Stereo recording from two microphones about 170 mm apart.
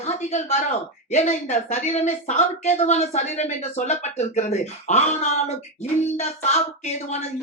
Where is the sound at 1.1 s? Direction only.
40° left (ahead or behind).